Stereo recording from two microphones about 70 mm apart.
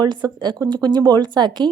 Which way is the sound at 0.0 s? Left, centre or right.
Right.